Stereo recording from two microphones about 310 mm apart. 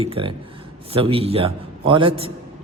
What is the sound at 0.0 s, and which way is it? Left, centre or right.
A man's voice, centre.